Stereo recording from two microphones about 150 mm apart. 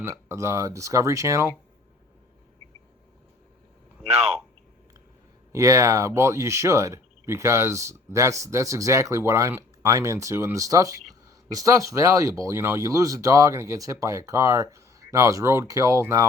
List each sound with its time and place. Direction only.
0.0 s speech: 20° right (ahead or behind)
5.5 s speech: 20° right (ahead or behind)